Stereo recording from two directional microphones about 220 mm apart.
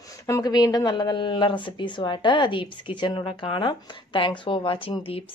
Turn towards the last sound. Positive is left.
turn(degrees=25)  # may be behind; listen again after turning